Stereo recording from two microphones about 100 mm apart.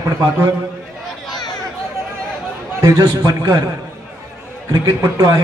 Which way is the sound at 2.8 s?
40° right (ahead or behind).